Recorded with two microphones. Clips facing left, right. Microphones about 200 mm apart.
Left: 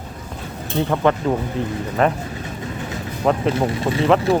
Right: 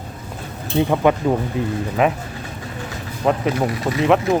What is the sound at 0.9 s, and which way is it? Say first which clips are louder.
Speech: right 1 dB; 10° right (ahead or behind).